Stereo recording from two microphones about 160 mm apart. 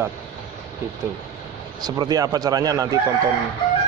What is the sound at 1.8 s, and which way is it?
Speech, 25° right (ahead or behind).